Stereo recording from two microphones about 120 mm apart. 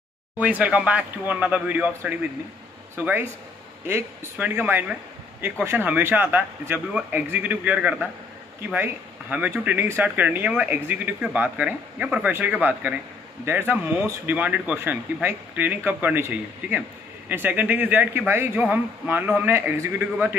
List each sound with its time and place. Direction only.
0.4 s speech: 10° right (ahead or behind)